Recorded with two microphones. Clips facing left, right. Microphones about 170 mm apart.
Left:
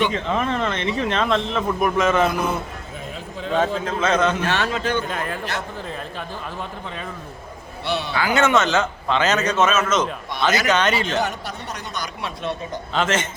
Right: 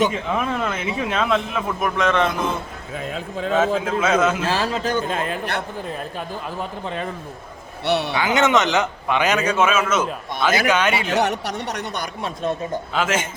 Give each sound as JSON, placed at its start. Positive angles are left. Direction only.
{"t": 0.1, "sound": "a man's voice", "side_deg": -5}
{"t": 3.5, "sound": "a man's voice", "side_deg": -5}
{"t": 4.4, "sound": "speech", "side_deg": -35}
{"t": 5.0, "sound": "a man's voice", "side_deg": -25}
{"t": 7.9, "sound": "speech", "side_deg": -70}
{"t": 8.1, "sound": "a man's voice", "side_deg": -20}
{"t": 11.1, "sound": "speech", "side_deg": -70}
{"t": 12.2, "sound": "speech", "side_deg": -45}
{"t": 12.9, "sound": "a man's voice", "side_deg": -10}